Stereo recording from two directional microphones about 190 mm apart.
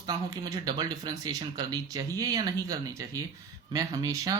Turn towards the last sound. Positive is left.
turn(degrees=-20)  # may be behind; listen again after turning